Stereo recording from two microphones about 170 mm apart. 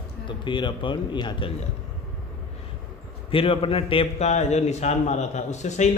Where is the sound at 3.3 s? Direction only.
30° left (ahead or behind).